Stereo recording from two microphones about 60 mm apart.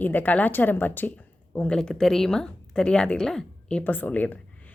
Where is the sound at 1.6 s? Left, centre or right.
Centre.